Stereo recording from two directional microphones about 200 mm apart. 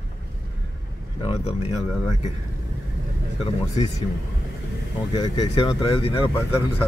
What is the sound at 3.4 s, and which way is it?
Speech, 35° left (ahead or behind).